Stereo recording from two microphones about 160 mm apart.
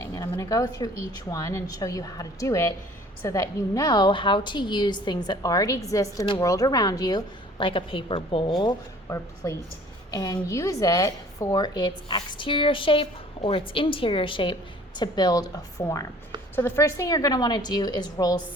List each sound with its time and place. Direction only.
0.0 s a woman's voice: 20° left (ahead or behind)